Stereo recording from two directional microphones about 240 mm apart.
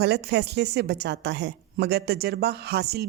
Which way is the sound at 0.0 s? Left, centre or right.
Right.